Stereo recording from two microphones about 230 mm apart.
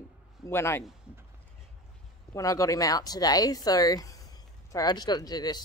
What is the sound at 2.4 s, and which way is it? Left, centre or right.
Speech, centre.